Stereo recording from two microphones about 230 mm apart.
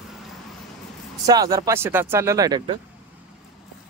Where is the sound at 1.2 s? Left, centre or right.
Centre.